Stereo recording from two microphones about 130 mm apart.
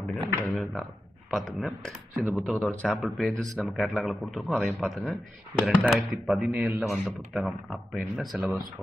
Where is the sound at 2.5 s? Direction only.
10° left (ahead or behind).